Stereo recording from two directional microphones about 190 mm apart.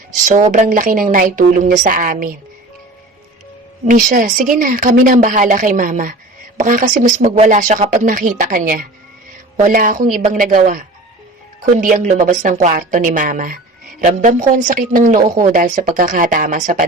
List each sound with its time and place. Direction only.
0.3 s speech: 40° right (ahead or behind)
3.8 s speech: 45° right (ahead or behind)